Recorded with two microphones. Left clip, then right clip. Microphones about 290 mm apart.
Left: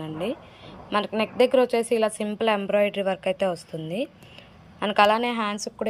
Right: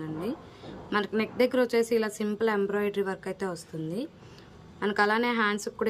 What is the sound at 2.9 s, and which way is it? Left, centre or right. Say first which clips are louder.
A woman's voice: left 6 dB; right.